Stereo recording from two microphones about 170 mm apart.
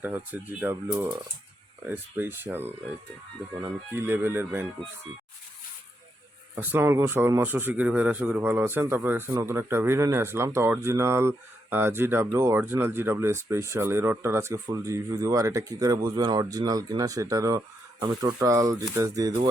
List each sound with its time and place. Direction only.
0.6 s a man's voice: 15° right (ahead or behind)
6.6 s a man's voice: 10° right (ahead or behind)